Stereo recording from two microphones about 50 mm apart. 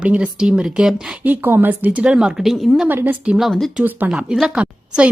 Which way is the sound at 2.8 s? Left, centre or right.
Right.